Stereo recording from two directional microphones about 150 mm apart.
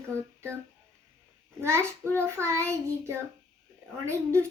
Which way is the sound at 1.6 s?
15° right (ahead or behind).